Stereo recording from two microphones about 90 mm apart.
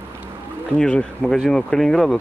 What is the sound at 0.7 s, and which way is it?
Speech, 10° left (ahead or behind).